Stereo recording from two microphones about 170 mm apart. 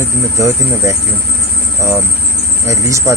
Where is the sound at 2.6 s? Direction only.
15° right (ahead or behind).